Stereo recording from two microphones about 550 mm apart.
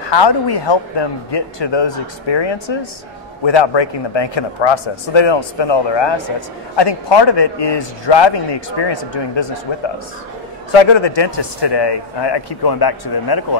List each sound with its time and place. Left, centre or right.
0.0 s a man's voice: left
10.7 s a man's voice: left